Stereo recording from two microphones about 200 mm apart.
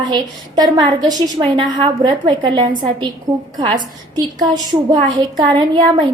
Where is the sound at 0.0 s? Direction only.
20° right (ahead or behind).